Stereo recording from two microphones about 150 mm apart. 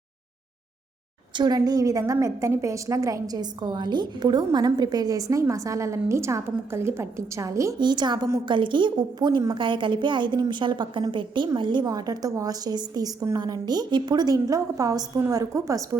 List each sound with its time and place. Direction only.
1.4 s a woman's voice: 25° right (ahead or behind)